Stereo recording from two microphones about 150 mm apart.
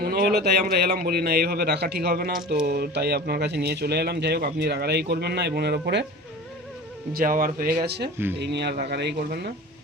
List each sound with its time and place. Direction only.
0.0 s speech: 90° right
7.1 s speech: 70° right (ahead or behind)
7.9 s speech: 90° right